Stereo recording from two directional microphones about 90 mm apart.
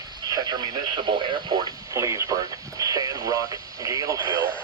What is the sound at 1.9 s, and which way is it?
Speech, 35° right (ahead or behind).